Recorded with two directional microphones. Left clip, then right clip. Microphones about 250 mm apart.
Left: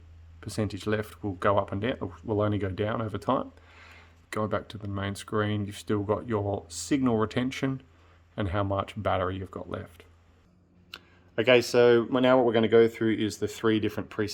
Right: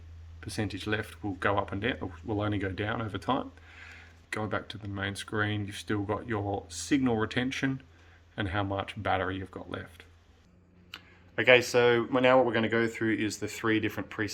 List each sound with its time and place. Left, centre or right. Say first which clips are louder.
0.3 s speech: left 2 dB; left
11.3 s speech: left 1 dB; left
13.6 s speech: left 2 dB; left